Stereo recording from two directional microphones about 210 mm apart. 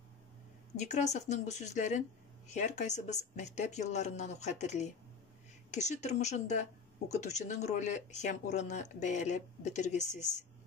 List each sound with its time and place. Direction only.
0.7 s speech: 35° left (ahead or behind)